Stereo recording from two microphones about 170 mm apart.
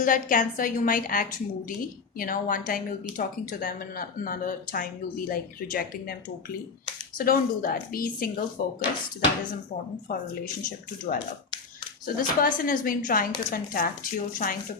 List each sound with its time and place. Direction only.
0.0 s a woman's voice: 50° left (ahead or behind)
7.2 s speech: 55° left (ahead or behind)
10.1 s speech: 55° left (ahead or behind)
12.0 s speech: 55° left (ahead or behind)